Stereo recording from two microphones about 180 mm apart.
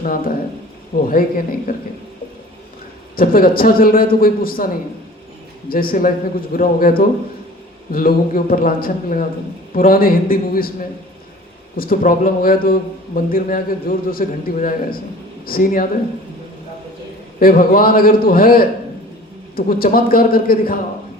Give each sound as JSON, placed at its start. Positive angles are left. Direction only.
{"t": 0.0, "sound": "a man's voice", "side_deg": 50}
{"t": 3.2, "sound": "a man's voice", "side_deg": 55}
{"t": 17.4, "sound": "a man's voice", "side_deg": 55}